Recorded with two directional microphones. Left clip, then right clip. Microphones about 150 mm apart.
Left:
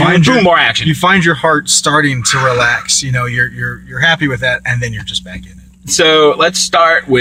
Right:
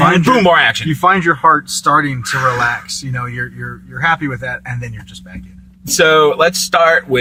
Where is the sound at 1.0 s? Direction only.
35° left (ahead or behind).